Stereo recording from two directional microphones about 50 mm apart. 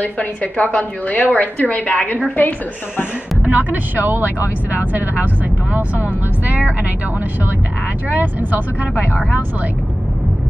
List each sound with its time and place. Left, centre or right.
0.0 s a woman's voice: left
3.4 s speech: right
8.4 s speech: right